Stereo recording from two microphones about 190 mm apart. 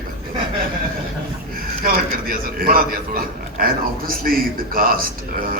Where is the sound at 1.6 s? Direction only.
50° right (ahead or behind).